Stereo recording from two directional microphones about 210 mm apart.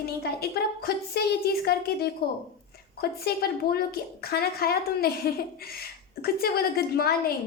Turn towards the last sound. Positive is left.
turn(degrees=45)  # may be behind; listen again after turning